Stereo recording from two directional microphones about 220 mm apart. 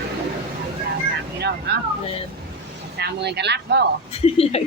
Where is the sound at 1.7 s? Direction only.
50° right (ahead or behind).